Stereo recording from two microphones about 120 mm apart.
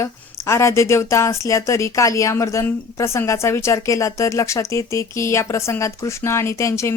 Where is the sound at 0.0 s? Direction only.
25° left (ahead or behind).